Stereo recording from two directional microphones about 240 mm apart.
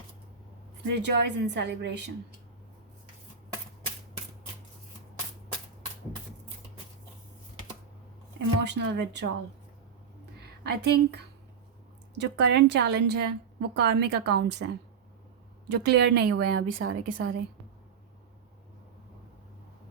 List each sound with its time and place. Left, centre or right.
1.0 s a woman's voice: right
8.4 s a woman's voice: right
10.6 s a woman's voice: right
15.7 s a woman's voice: right
16.3 s a woman's voice: right